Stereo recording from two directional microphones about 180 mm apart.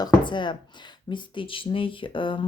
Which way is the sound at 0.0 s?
25° left (ahead or behind).